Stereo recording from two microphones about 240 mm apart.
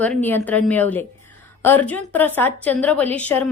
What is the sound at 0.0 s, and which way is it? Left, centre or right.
A woman's voice, centre.